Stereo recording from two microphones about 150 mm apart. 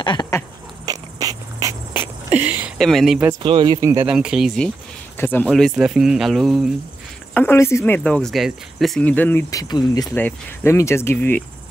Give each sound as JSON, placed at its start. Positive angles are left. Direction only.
{"t": 0.0, "sound": "a sound", "side_deg": 30}
{"t": 0.8, "sound": "a sound", "side_deg": -25}
{"t": 2.8, "sound": "speech", "side_deg": 0}
{"t": 3.4, "sound": "speech", "side_deg": -35}
{"t": 3.8, "sound": "speech", "side_deg": -15}
{"t": 4.1, "sound": "speech", "side_deg": -5}
{"t": 5.1, "sound": "speech", "side_deg": 15}
{"t": 5.5, "sound": "speech", "side_deg": 0}
{"t": 7.3, "sound": "speech", "side_deg": 15}
{"t": 9.6, "sound": "speech", "side_deg": 25}
{"t": 10.1, "sound": "speech", "side_deg": 15}